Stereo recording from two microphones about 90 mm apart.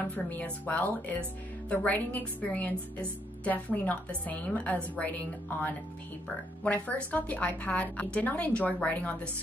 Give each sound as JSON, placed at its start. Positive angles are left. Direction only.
{"t": 0.1, "sound": "a woman's voice", "side_deg": 20}
{"t": 6.6, "sound": "a woman's voice", "side_deg": 15}